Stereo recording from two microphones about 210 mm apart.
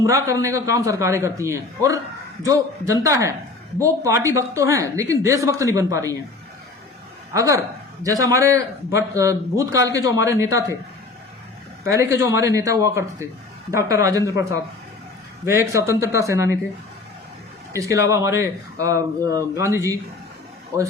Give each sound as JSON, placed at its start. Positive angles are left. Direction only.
{"t": 0.0, "sound": "a woman's voice", "side_deg": -15}
{"t": 7.3, "sound": "a woman's voice", "side_deg": -15}
{"t": 11.9, "sound": "a woman's voice", "side_deg": -15}
{"t": 17.7, "sound": "a woman's voice", "side_deg": -15}